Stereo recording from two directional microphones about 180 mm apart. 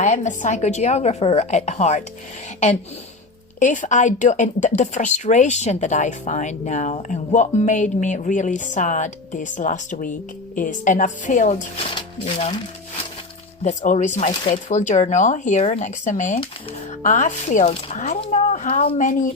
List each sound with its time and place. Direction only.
0.0 s speech: 40° left (ahead or behind)
3.6 s speech: 45° left (ahead or behind)
13.7 s speech: 40° left (ahead or behind)
18.9 s speech: 45° left (ahead or behind)